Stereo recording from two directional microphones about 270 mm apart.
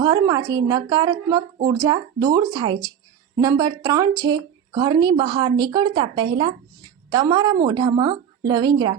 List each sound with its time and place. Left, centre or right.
0.0 s speech: centre